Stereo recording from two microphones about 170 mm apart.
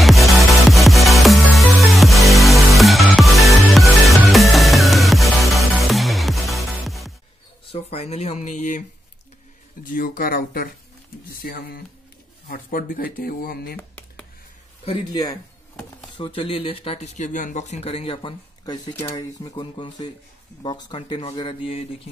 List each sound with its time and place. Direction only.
0.0 s music: centre (ahead or behind)
7.7 s speech: 40° left (ahead or behind)
9.8 s speech: 55° left (ahead or behind)
13.7 s a sound: 10° left (ahead or behind)
16.2 s speech: 30° left (ahead or behind)